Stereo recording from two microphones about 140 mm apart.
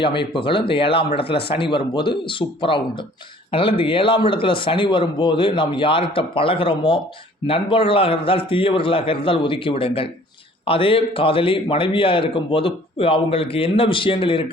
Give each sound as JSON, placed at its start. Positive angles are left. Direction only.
{"t": 0.0, "sound": "a man's voice", "side_deg": 35}